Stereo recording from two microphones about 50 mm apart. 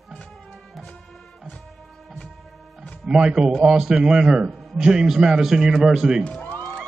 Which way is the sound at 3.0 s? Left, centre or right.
Centre.